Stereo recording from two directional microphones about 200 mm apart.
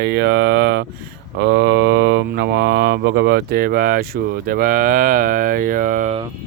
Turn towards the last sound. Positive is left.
turn(degrees=-40)  # may be behind; listen again after turning